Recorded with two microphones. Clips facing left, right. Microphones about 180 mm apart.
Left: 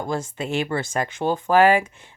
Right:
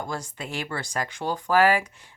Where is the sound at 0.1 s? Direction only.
25° left (ahead or behind).